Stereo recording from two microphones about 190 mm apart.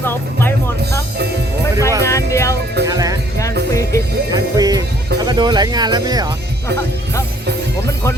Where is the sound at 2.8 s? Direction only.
20° right (ahead or behind).